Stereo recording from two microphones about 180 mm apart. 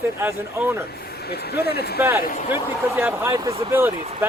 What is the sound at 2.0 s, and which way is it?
Speech, 15° right (ahead or behind).